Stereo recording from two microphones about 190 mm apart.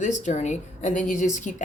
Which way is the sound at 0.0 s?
40° left (ahead or behind).